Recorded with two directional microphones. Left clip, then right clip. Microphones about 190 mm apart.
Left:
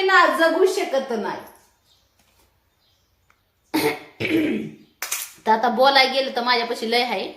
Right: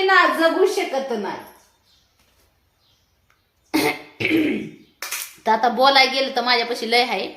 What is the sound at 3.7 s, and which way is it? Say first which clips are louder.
Throat clearing: right 1 dB; 10° right (ahead or behind).